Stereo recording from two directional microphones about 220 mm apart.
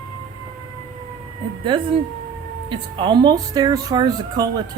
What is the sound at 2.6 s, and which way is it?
Speech, 20° right (ahead or behind).